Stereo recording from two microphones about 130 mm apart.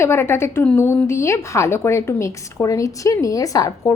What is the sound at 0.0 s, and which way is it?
A woman's voice, 20° left (ahead or behind).